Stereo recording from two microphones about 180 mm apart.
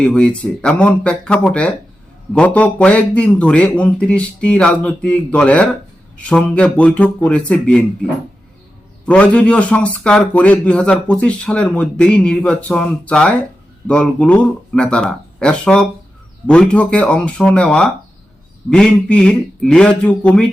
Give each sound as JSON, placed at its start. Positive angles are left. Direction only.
{"t": 0.0, "sound": "a man's voice", "side_deg": 5}
{"t": 9.0, "sound": "a man's voice", "side_deg": 5}